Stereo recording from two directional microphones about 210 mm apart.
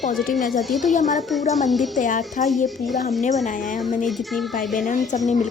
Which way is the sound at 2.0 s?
40° left (ahead or behind).